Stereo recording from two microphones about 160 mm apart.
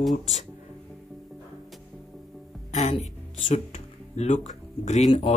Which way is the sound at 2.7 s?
45° left (ahead or behind).